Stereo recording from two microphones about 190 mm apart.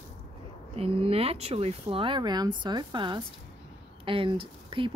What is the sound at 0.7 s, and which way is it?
Speech, 30° right (ahead or behind).